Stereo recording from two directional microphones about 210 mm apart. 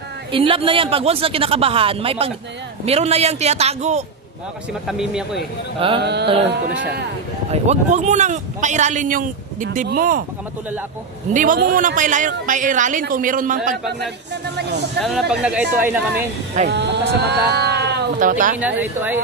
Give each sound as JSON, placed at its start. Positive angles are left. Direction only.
{"t": 0.3, "sound": "speech", "side_deg": -25}
{"t": 4.8, "sound": "speech", "side_deg": 0}
{"t": 5.9, "sound": "a sound", "side_deg": -55}
{"t": 6.2, "sound": "speech", "side_deg": -25}
{"t": 7.5, "sound": "speech", "side_deg": -35}
{"t": 11.3, "sound": "speech", "side_deg": -40}
{"t": 15.0, "sound": "speech", "side_deg": 0}
{"t": 16.6, "sound": "speech", "side_deg": -55}
{"t": 17.2, "sound": "sheep", "side_deg": -50}
{"t": 18.3, "sound": "speech", "side_deg": -40}
{"t": 18.6, "sound": "speech", "side_deg": -10}